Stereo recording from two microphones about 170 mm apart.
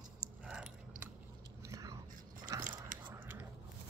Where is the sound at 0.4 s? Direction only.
5° right (ahead or behind).